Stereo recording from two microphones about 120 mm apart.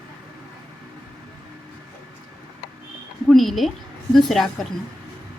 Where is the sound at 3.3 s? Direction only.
Centre (ahead or behind).